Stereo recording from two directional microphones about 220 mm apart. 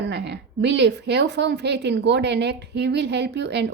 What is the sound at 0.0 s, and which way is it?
A woman's voice, 50° right (ahead or behind).